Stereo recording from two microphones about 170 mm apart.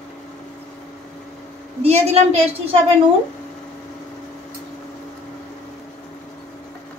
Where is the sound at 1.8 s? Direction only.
40° right (ahead or behind).